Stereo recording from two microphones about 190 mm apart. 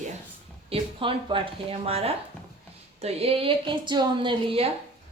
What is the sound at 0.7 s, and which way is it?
A woman's voice, 25° right (ahead or behind).